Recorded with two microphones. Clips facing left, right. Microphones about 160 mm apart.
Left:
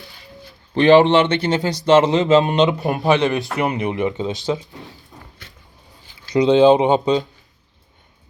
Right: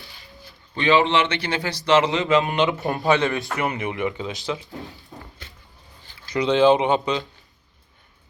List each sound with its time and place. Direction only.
0.8 s a man's voice: 40° left (ahead or behind)
1.5 s a man's voice: 20° left (ahead or behind)
6.5 s a man's voice: 25° left (ahead or behind)